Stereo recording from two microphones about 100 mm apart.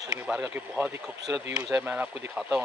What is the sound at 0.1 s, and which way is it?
Speech, 10° right (ahead or behind).